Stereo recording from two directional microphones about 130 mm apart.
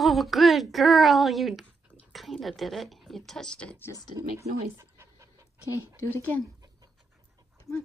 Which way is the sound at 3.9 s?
25° right (ahead or behind).